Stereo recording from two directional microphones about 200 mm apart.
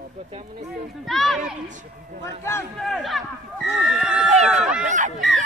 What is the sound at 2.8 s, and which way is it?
Speech, centre (ahead or behind).